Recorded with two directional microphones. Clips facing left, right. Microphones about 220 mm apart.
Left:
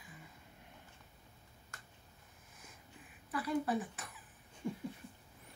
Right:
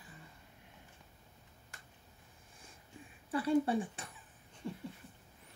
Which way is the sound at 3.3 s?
30° right (ahead or behind).